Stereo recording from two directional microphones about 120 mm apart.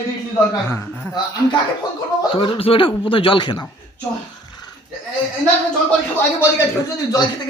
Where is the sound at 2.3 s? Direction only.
50° left (ahead or behind).